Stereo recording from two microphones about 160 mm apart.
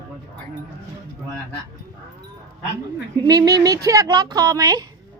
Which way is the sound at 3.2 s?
25° right (ahead or behind).